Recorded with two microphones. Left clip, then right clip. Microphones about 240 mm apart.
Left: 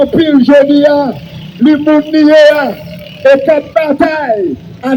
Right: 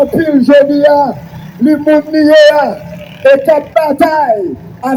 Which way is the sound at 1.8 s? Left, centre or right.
Right.